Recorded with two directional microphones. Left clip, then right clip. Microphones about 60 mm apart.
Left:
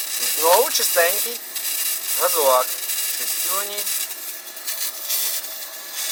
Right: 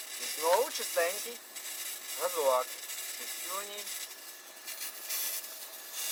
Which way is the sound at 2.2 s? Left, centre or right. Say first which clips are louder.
Left 11 dB; left.